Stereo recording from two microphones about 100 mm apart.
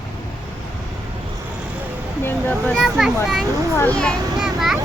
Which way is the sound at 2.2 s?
20° left (ahead or behind).